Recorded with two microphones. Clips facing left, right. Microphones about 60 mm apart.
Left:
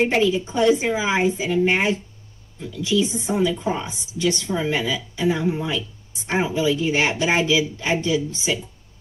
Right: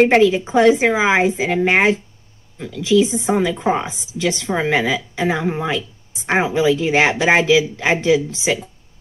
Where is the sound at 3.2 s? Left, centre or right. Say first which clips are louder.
Right 4 dB; right.